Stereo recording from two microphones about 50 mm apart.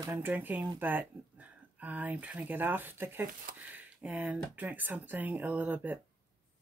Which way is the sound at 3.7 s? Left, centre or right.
Right.